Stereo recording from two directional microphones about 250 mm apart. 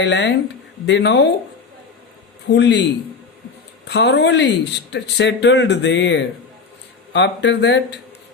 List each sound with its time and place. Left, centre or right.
0.0 s speech: left
2.5 s speech: left
3.8 s speech: left